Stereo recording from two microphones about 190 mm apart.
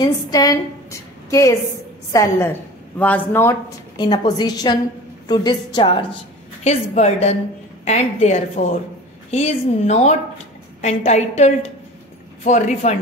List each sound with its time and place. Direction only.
0.0 s a woman's voice: 20° left (ahead or behind); by 12.9 s 40° left (ahead or behind)